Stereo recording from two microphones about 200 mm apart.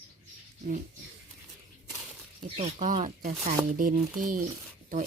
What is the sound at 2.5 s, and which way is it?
Speech, 35° right (ahead or behind).